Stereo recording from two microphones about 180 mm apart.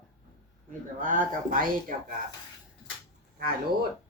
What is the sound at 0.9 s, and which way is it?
Speech, 50° right (ahead or behind).